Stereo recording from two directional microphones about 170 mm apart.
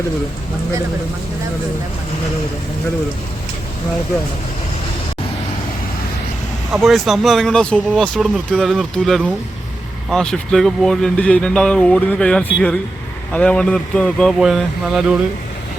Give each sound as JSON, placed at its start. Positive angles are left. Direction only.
{"t": 6.7, "sound": "speech", "side_deg": 0}